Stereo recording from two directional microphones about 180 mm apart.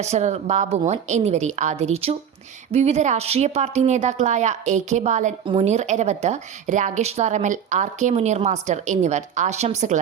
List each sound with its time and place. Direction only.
0.0 s a woman's voice: 40° right (ahead or behind)